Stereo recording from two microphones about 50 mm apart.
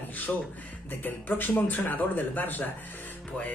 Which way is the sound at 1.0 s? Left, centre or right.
Left.